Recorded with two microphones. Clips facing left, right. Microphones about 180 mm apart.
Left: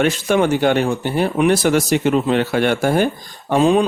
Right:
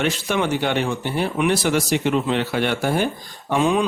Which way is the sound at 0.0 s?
50° left (ahead or behind).